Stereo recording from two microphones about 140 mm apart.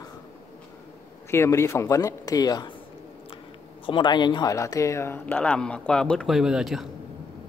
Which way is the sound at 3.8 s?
35° left (ahead or behind).